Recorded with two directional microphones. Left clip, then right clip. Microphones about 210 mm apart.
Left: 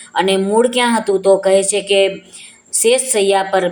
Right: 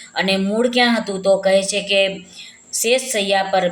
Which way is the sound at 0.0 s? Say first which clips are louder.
Left 4 dB; 20° left (ahead or behind).